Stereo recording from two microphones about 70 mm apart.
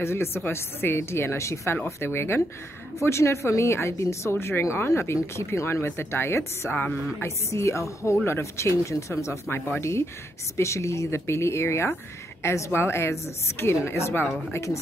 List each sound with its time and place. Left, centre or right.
0.0 s speech: left
7.2 s a woman's voice: left